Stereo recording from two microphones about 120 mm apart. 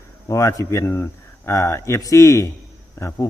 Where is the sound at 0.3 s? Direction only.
25° left (ahead or behind).